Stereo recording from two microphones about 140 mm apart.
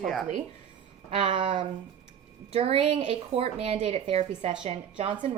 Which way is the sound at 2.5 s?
45° right (ahead or behind).